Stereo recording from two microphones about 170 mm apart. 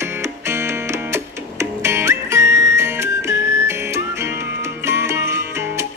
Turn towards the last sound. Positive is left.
turn(degrees=-15)  # may be behind; listen again after turning